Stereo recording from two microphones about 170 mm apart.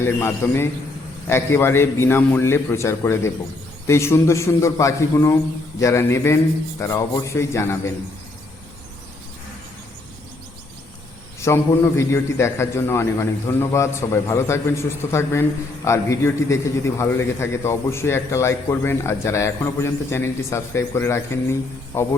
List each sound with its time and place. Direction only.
0.0 s a man's voice: 15° left (ahead or behind)
11.3 s a man's voice: 15° left (ahead or behind)